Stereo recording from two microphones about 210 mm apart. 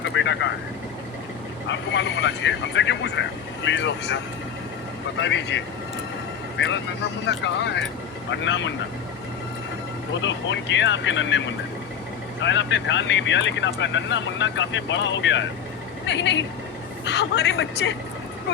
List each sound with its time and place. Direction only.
0.1 s vehicle: 60° left (ahead or behind)
1.7 s speech: 60° left (ahead or behind)
5.2 s speech: 60° left (ahead or behind)
7.3 s speech: 60° left (ahead or behind)
10.2 s speech: 60° left (ahead or behind)